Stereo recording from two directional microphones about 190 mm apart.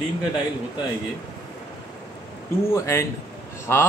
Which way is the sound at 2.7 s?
15° left (ahead or behind).